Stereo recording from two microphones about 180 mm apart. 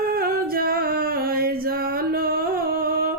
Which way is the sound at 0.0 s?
55° right (ahead or behind).